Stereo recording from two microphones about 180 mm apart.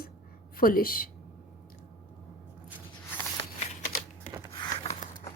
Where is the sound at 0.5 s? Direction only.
55° left (ahead or behind).